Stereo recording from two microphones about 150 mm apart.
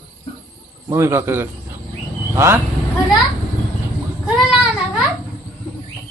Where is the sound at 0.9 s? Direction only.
15° right (ahead or behind).